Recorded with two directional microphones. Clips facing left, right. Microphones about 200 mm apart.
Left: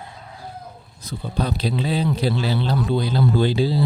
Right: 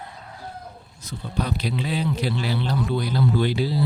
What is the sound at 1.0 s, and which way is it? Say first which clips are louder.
Speech: left 2 dB; 30° left (ahead or behind).